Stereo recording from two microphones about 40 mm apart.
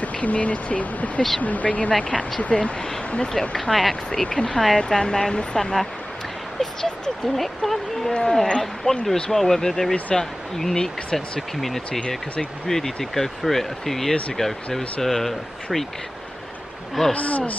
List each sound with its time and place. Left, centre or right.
0.0 s speech: left
1.9 s speech: left
3.3 s speech: centre
4.2 s speech: left
5.3 s speech: left
5.6 s speech: centre
7.3 s speech: centre
8.0 s speech: left
9.0 s speech: centre
17.1 s speech: left